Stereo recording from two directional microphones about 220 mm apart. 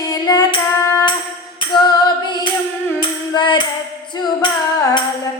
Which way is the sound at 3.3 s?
20° left (ahead or behind).